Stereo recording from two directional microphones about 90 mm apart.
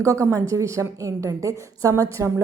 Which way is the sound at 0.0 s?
35° right (ahead or behind).